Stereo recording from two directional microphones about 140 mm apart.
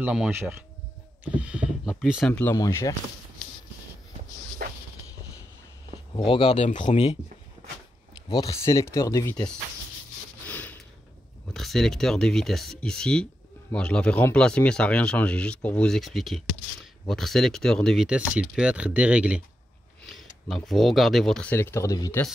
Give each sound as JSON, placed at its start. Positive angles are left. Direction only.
{"t": 0.0, "sound": "speech", "side_deg": -5}
{"t": 0.3, "sound": "speech", "side_deg": -15}
{"t": 1.2, "sound": "a sound", "side_deg": -10}
{"t": 2.2, "sound": "speech", "side_deg": 10}
{"t": 2.5, "sound": "speech", "side_deg": 25}
{"t": 4.6, "sound": "a sound", "side_deg": -90}
{"t": 6.2, "sound": "speech", "side_deg": 40}
{"t": 8.3, "sound": "speech", "side_deg": 25}
{"t": 10.4, "sound": "a sound", "side_deg": 10}
{"t": 11.5, "sound": "speech", "side_deg": 0}
{"t": 20.0, "sound": "speech", "side_deg": 0}